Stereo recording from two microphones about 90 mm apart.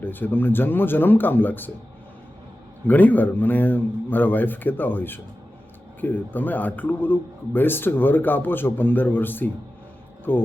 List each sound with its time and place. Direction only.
0.0 s speech: 20° left (ahead or behind)
2.8 s speech: 20° left (ahead or behind)